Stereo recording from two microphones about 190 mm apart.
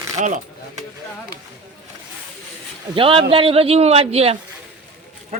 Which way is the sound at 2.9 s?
30° right (ahead or behind).